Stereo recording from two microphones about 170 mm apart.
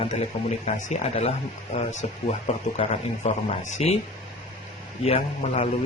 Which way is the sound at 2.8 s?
40° left (ahead or behind).